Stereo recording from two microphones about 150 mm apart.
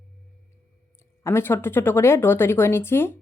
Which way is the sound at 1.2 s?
15° left (ahead or behind).